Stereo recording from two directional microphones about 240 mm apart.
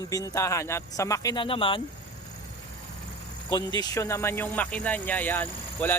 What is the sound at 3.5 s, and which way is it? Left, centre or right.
Speech, centre.